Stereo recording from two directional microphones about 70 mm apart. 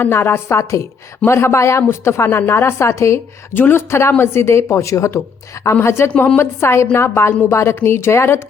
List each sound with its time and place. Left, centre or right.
0.0 s a woman's voice: left
3.5 s a woman's voice: left
6.1 s a woman's voice: left
6.4 s a woman's voice: left